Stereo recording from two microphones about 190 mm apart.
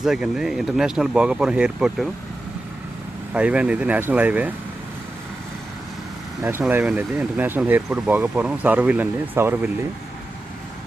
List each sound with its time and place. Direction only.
0.0 s speech: centre (ahead or behind)
3.3 s speech: 5° right (ahead or behind)
6.4 s speech: 10° right (ahead or behind)